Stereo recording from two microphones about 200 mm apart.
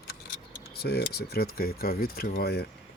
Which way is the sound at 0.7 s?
55° left (ahead or behind).